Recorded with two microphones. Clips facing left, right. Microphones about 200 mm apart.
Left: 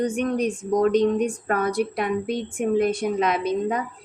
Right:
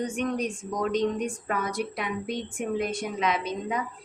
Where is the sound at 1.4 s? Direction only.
55° left (ahead or behind).